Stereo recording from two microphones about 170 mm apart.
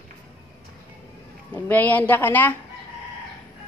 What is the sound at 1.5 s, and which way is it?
A woman's voice, 10° left (ahead or behind).